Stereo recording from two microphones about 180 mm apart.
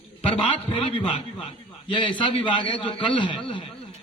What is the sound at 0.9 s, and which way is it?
A man's voice, 30° left (ahead or behind).